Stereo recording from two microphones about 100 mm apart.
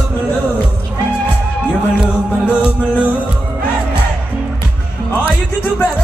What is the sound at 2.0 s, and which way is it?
Music, 10° right (ahead or behind).